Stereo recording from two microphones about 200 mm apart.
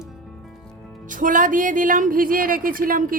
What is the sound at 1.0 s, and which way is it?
A woman's voice, 40° right (ahead or behind).